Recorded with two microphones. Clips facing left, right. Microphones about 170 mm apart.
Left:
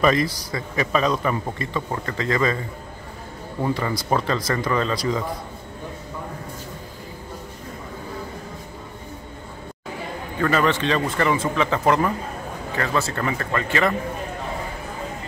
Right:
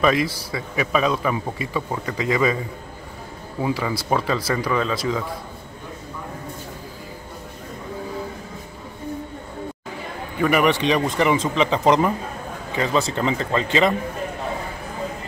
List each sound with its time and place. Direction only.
0.0 s a man's voice: 5° right (ahead or behind)
3.6 s speech: 5° right (ahead or behind)
10.4 s a man's voice: 15° right (ahead or behind)